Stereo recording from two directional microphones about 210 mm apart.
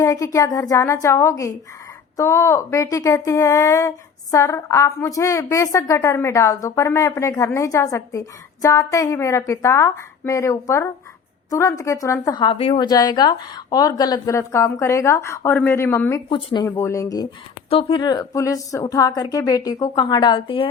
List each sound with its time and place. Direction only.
0.0 s a woman's voice: 15° left (ahead or behind)
16.3 s speech: 25° left (ahead or behind)
16.6 s a woman's voice: 10° left (ahead or behind)
17.7 s speech: 25° left (ahead or behind)